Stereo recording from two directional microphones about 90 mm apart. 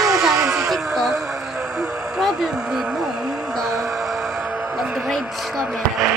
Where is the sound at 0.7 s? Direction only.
5° left (ahead or behind).